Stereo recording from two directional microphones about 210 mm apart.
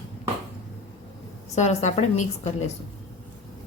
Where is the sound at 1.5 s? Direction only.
30° left (ahead or behind).